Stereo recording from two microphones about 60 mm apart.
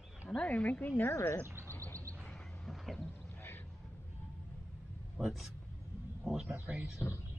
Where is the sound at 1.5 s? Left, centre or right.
Right.